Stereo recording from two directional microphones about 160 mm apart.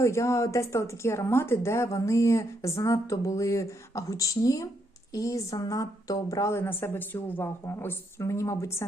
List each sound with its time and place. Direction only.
0.0 s speech: 20° left (ahead or behind)